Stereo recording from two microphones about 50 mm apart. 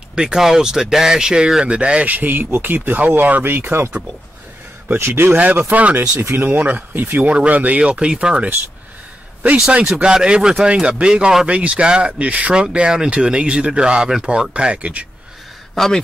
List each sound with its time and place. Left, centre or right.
0.1 s speech: centre; by 3.8 s right
4.9 s a man's voice: right
5.4 s speech: right
6.2 s speech: right
7.2 s speech: right
10.0 s speech: centre
15.7 s speech: centre